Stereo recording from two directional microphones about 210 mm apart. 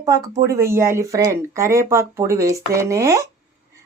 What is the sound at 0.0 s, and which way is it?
A woman's voice, 15° right (ahead or behind).